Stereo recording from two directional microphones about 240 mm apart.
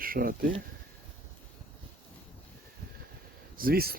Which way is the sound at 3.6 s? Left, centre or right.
Right.